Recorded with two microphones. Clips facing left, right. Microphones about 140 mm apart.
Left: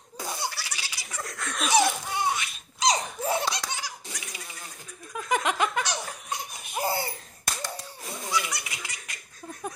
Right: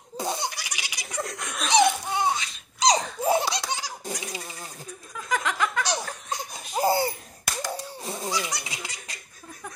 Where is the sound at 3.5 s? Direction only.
30° right (ahead or behind).